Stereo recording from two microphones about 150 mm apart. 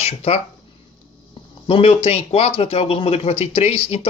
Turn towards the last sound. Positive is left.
turn(degrees=40)  # may be behind; listen again after turning